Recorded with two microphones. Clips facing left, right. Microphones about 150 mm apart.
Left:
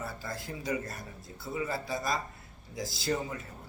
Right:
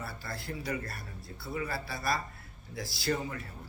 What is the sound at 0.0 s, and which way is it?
Speech, 20° left (ahead or behind).